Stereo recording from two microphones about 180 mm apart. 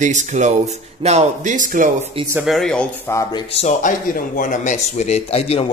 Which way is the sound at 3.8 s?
45° left (ahead or behind).